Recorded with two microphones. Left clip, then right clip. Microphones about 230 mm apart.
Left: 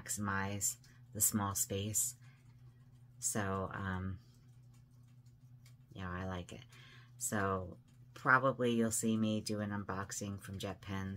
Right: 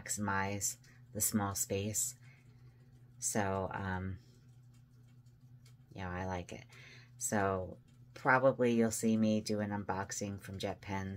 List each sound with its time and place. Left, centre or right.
0.0 s speech: centre
3.2 s speech: left
3.5 s speech: centre
5.9 s speech: centre
6.8 s a sound: left
7.3 s speech: centre